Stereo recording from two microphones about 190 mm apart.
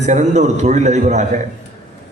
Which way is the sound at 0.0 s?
40° right (ahead or behind).